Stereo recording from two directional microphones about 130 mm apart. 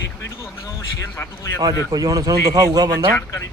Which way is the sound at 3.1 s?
20° left (ahead or behind).